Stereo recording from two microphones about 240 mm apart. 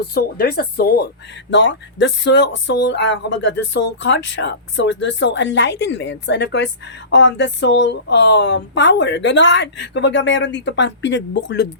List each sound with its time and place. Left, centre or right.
0.0 s speech: left